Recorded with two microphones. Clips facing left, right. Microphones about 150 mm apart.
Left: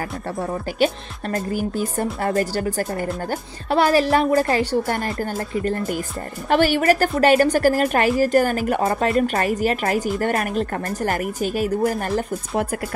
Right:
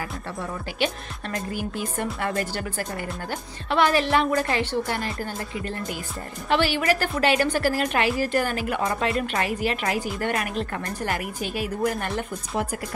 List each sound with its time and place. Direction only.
0.4 s a woman's voice: 40° left (ahead or behind)